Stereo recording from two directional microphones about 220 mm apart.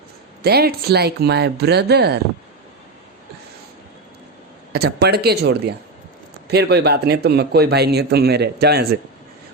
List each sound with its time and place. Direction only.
0.4 s speech: 45° right (ahead or behind)
4.7 s speech: 45° right (ahead or behind)